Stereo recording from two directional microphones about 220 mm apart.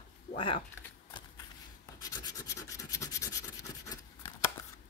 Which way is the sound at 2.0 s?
15° left (ahead or behind).